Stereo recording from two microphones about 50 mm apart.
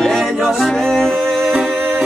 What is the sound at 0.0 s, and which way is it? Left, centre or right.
A capella, centre.